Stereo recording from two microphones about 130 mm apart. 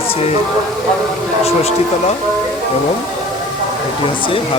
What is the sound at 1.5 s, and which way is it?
Speech, 50° left (ahead or behind).